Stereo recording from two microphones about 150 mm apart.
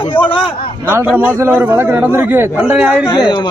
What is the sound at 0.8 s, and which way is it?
A man's voice, 15° right (ahead or behind).